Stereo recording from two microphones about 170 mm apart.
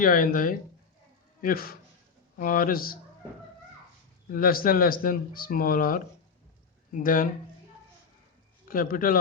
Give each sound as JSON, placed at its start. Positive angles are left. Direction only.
{"t": 0.0, "sound": "speech", "side_deg": 55}
{"t": 4.3, "sound": "speech", "side_deg": 60}
{"t": 8.6, "sound": "a man's voice", "side_deg": 55}